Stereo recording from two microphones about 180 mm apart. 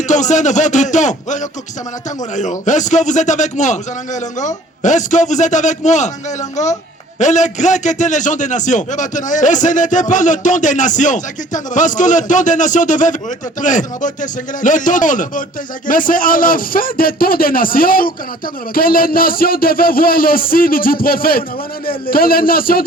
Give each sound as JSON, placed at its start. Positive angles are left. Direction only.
{"t": 0.1, "sound": "a man's voice", "side_deg": 40}